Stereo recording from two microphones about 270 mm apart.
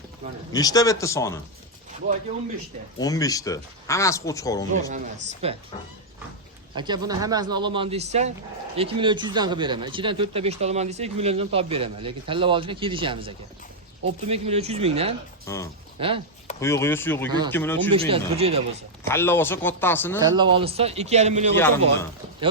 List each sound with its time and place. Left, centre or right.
0.5 s speech: centre
3.0 s speech: centre
4.9 s speech: right
6.7 s speech: centre
15.4 s speech: centre
16.0 s speech: centre
16.6 s speech: centre
17.9 s speech: right
19.0 s speech: centre
20.3 s speech: centre
21.5 s speech: centre